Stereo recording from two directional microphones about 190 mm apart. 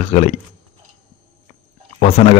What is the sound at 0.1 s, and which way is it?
Speech, 35° left (ahead or behind).